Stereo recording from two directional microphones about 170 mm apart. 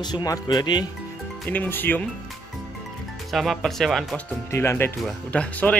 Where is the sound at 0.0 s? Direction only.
25° left (ahead or behind).